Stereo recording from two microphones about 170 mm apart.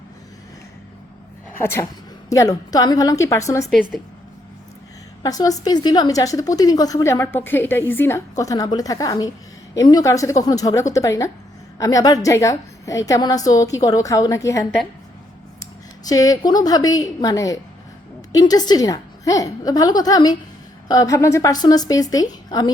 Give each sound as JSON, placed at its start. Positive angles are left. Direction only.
{"t": 1.5, "sound": "a woman's voice", "side_deg": 15}
{"t": 5.2, "sound": "a woman's voice", "side_deg": 20}
{"t": 16.0, "sound": "a woman's voice", "side_deg": 20}